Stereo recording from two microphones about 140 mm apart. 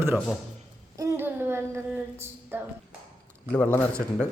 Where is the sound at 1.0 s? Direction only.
20° right (ahead or behind).